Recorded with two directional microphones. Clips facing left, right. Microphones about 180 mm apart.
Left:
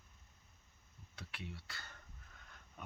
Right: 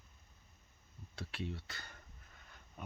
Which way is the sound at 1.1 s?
30° right (ahead or behind).